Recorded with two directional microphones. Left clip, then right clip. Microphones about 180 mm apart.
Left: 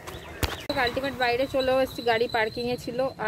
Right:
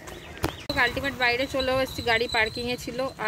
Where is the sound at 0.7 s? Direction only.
Centre (ahead or behind).